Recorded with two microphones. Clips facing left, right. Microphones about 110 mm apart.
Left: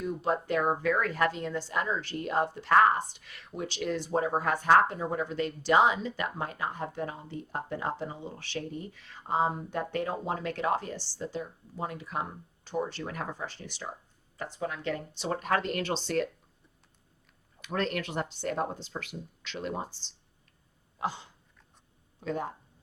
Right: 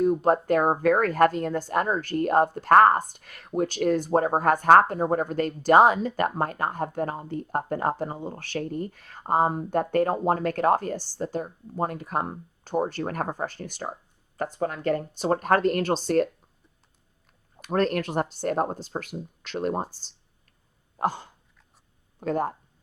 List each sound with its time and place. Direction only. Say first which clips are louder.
0.0 s a woman's voice: right 9 dB; 45° right (ahead or behind)
17.6 s a woman's voice: right 7 dB; 45° right (ahead or behind)